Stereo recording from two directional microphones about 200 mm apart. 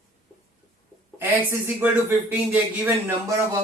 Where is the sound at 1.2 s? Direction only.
10° right (ahead or behind).